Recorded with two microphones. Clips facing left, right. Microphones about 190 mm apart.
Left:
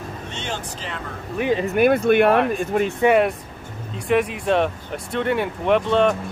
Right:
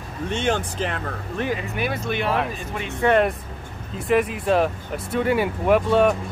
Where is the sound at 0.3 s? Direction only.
55° right (ahead or behind).